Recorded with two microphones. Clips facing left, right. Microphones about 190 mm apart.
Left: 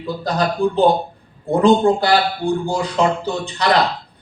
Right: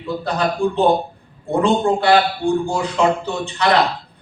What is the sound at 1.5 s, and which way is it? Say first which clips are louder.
A man's voice: left 3 dB; 35° left (ahead or behind).